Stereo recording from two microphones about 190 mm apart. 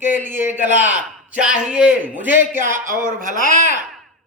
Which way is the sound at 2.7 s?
45° right (ahead or behind).